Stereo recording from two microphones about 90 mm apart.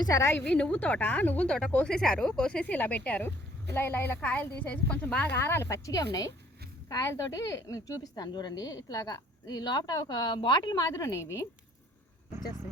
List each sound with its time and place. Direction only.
0.0 s a woman's voice: 35° left (ahead or behind)
0.4 s a woman's voice: 10° left (ahead or behind); by 11.4 s 30° left (ahead or behind)